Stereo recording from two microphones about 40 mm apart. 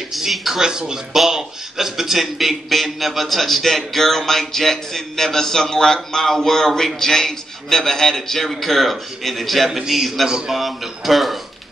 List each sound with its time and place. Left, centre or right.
0.1 s a man's voice: centre
9.7 s a man's voice: centre
10.5 s a man's voice: centre